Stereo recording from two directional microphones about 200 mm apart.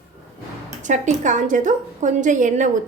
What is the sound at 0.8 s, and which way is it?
A woman's voice, 40° right (ahead or behind).